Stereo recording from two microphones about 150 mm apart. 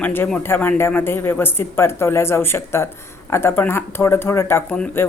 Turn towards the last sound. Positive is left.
turn(degrees=15)  # may be behind; listen again after turning